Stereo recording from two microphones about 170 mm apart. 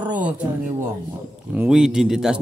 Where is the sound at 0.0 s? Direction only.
10° right (ahead or behind).